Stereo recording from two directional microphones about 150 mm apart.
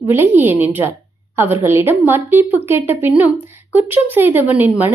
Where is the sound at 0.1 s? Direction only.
15° right (ahead or behind).